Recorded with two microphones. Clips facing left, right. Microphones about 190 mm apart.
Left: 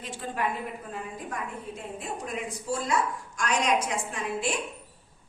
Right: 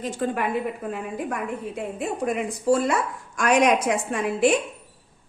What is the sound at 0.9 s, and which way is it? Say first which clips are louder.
A woman's voice: right 8 dB; 70° right (ahead or behind).